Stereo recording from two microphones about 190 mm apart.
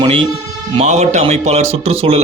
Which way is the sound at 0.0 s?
25° right (ahead or behind).